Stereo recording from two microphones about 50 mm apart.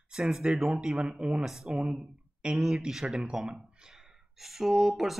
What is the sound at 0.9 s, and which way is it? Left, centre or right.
Speech, centre.